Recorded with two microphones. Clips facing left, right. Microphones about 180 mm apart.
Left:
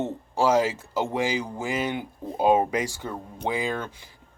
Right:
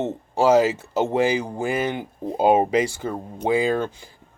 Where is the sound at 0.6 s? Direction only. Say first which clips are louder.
Right 5 dB; 70° right (ahead or behind).